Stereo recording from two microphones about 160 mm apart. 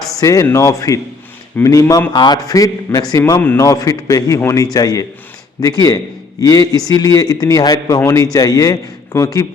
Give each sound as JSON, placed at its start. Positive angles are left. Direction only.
{"t": 0.2, "sound": "a man's voice", "side_deg": 20}